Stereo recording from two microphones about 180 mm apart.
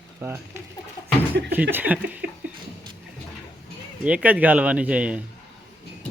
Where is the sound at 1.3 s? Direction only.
60° right (ahead or behind).